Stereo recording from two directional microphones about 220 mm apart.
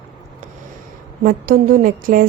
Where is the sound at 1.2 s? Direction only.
40° right (ahead or behind).